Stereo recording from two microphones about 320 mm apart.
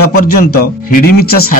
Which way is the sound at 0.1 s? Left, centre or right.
Left.